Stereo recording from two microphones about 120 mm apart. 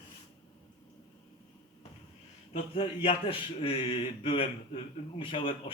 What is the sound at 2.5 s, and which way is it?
A man's voice, 50° left (ahead or behind).